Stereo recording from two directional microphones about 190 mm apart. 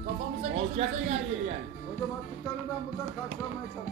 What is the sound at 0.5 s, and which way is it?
Speech, 35° right (ahead or behind).